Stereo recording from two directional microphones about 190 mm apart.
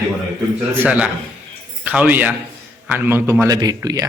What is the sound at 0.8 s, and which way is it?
A man's voice, 5° right (ahead or behind).